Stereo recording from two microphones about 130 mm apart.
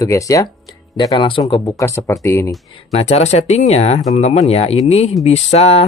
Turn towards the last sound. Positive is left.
turn(degrees=55)  # may be behind; listen again after turning